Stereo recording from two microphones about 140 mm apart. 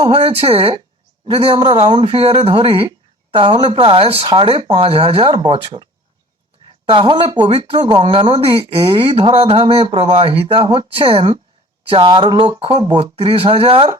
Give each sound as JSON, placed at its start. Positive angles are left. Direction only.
{"t": 0.0, "sound": "speech", "side_deg": -45}